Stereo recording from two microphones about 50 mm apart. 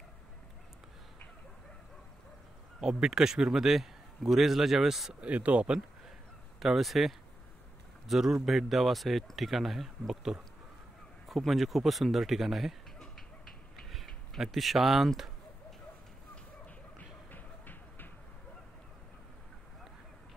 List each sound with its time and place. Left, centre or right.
2.8 s a man's voice: centre
5.2 s speech: right
6.6 s a man's voice: centre
13.7 s a sound: centre
14.4 s speech: centre
17.3 s a sound: left